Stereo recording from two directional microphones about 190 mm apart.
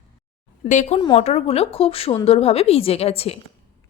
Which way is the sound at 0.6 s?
40° left (ahead or behind).